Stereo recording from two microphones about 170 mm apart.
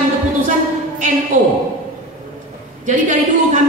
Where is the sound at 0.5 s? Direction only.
50° right (ahead or behind).